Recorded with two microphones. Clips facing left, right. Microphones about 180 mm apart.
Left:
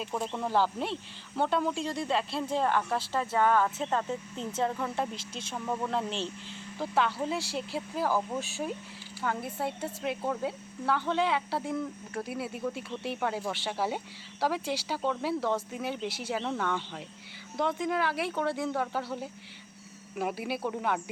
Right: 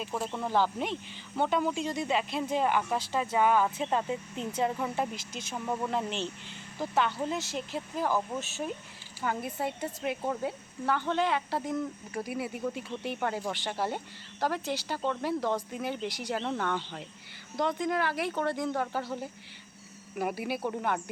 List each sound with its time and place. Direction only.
0.0 s speech: 5° right (ahead or behind)
5.1 s speech: 30° left (ahead or behind)
5.5 s speech: 5° right (ahead or behind)
9.2 s speech: 5° right (ahead or behind)
20.1 s speech: centre (ahead or behind)